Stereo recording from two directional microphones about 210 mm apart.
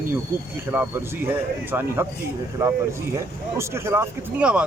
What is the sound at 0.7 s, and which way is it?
Speech, 10° right (ahead or behind).